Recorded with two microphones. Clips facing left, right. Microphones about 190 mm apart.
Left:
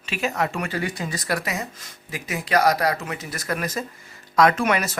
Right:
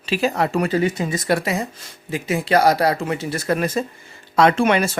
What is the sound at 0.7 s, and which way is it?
Speech, 20° right (ahead or behind).